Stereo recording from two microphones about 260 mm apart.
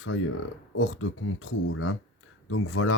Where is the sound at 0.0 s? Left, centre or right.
Left.